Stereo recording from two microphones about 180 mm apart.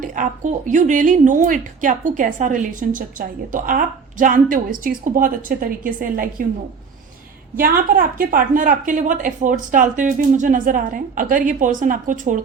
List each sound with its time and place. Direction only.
0.0 s a woman's voice: 45° right (ahead or behind)
7.5 s a woman's voice: 50° right (ahead or behind)